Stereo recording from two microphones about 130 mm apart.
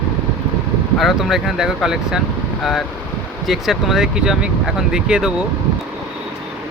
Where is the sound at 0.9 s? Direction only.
Centre (ahead or behind).